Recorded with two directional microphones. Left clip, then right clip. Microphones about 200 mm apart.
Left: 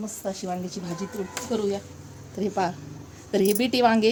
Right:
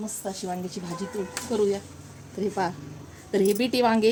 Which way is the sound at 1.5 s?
30° left (ahead or behind).